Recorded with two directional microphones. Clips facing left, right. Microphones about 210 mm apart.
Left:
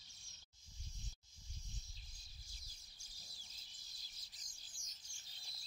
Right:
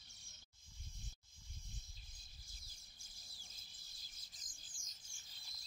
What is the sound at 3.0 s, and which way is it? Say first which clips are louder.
Bird: left 1 dB; 50° right (ahead or behind).